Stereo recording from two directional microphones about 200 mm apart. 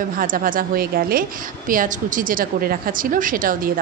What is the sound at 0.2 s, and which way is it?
A woman's voice, 45° right (ahead or behind).